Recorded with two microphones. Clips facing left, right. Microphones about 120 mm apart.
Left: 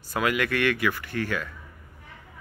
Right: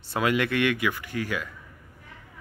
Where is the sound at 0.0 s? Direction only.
25° right (ahead or behind).